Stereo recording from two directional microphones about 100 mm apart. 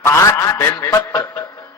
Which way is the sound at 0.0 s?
30° left (ahead or behind).